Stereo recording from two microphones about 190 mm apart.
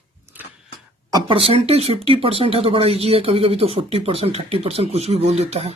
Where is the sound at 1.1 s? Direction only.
25° right (ahead or behind).